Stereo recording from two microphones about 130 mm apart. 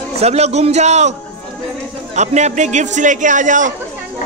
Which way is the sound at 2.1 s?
60° right (ahead or behind).